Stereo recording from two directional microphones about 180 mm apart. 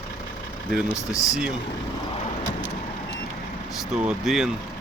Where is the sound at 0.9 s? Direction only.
20° left (ahead or behind).